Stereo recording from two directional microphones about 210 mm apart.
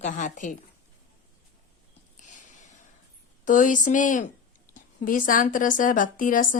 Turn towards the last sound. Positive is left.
turn(degrees=40)  # may be behind; listen again after turning